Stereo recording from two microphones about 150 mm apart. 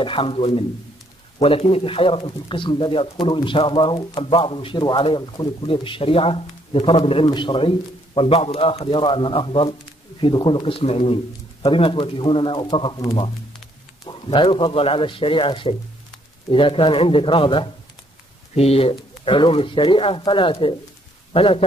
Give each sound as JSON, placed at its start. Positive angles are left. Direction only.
{"t": 0.0, "sound": "speech", "side_deg": 35}
{"t": 14.0, "sound": "speech", "side_deg": 35}